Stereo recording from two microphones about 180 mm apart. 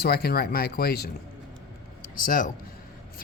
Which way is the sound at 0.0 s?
60° left (ahead or behind).